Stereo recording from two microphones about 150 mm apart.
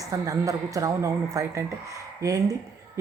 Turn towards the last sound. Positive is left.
turn(degrees=-25)  # may be behind; listen again after turning